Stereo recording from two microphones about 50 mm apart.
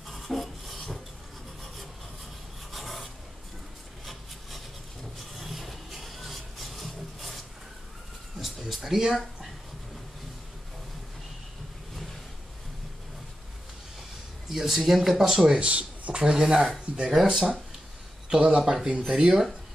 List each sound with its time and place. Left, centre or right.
0.1 s filing: centre
2.7 s rub: centre
4.0 s wood: centre
5.4 s a sound: centre
14.5 s speech: centre
15.6 s speech: right
16.2 s speech: centre
18.3 s speech: centre